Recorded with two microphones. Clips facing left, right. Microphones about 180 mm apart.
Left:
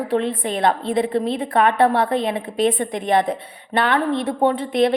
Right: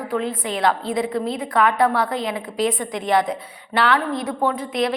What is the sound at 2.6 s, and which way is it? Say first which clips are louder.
Speech: left 3 dB; 55° left (ahead or behind).